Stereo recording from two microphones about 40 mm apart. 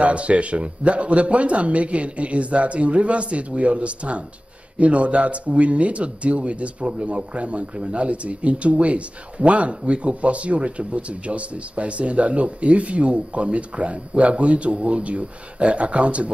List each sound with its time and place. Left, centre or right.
0.0 s a man's voice: right